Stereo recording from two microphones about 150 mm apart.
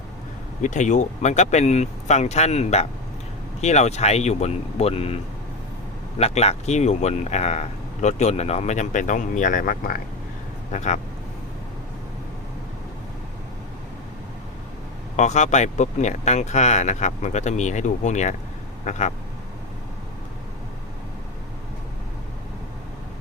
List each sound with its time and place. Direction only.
0.6 s speech: 55° left (ahead or behind)
10.7 s speech: 50° left (ahead or behind)
15.1 s speech: 50° left (ahead or behind)